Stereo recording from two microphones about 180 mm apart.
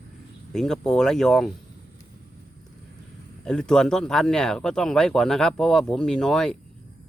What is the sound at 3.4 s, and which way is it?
Speech, 5° left (ahead or behind).